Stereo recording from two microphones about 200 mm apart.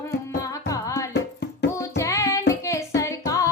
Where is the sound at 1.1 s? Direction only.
55° left (ahead or behind).